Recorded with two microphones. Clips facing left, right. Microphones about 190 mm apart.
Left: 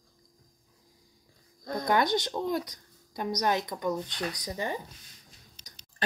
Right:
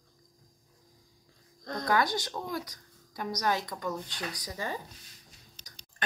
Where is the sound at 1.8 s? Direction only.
20° left (ahead or behind).